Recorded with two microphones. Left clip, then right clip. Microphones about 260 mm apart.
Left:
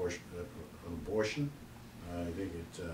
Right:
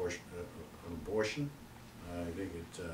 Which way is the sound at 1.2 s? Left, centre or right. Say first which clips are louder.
Left 1 dB; centre.